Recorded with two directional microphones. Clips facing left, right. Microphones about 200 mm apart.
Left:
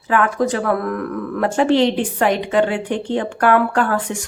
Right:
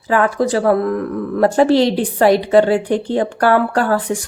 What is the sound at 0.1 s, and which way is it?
A woman's voice, 35° right (ahead or behind).